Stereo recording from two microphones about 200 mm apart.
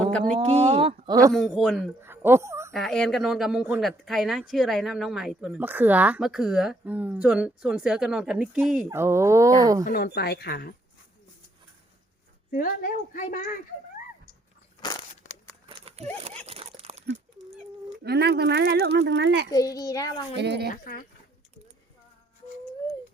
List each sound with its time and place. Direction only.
0.3 s speech: 30° right (ahead or behind)
1.3 s speech: centre (ahead or behind)
2.0 s music: 10° right (ahead or behind)
2.7 s speech: centre (ahead or behind); by 9.8 s 15° right (ahead or behind)
9.8 s a woman's voice: 50° left (ahead or behind)
12.5 s a woman's voice: 45° left (ahead or behind)
14.8 s crushing: 15° left (ahead or behind)
15.7 s a sound: 30° right (ahead or behind)
16.5 s crumpling: 30° right (ahead or behind)
18.0 s speech: 55° right (ahead or behind)
19.5 s a child's voice: 15° left (ahead or behind)
20.3 s speech: 55° right (ahead or behind)
20.8 s a woman's voice: 45° left (ahead or behind)